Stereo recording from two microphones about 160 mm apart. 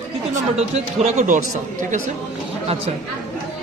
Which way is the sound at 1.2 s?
50° right (ahead or behind).